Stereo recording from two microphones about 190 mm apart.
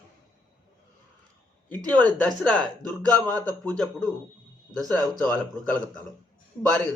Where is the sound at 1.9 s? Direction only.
5° left (ahead or behind).